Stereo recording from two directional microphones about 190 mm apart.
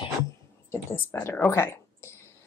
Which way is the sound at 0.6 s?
10° left (ahead or behind).